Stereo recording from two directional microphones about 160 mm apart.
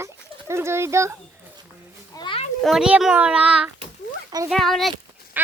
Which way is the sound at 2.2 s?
30° left (ahead or behind).